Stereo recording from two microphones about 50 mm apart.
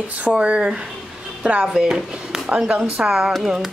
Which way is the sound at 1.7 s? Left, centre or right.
Centre.